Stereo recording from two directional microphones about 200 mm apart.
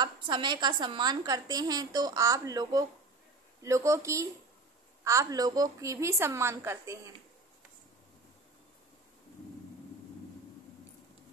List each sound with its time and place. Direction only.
0.0 s a woman's voice: 20° right (ahead or behind)